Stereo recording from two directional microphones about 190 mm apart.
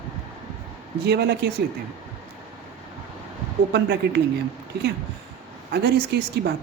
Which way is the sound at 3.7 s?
60° right (ahead or behind).